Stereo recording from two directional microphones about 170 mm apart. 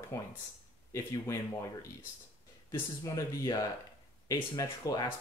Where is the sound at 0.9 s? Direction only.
20° left (ahead or behind).